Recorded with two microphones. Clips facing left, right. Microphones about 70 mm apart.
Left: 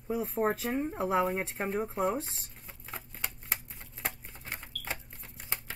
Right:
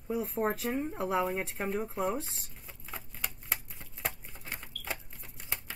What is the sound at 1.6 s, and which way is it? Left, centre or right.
Speech, centre.